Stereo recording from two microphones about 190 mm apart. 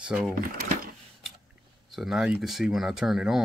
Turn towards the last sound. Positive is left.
turn(degrees=0)  # may be behind; listen again after turning